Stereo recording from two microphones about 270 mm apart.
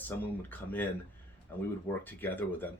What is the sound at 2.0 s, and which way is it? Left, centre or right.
Speech, centre.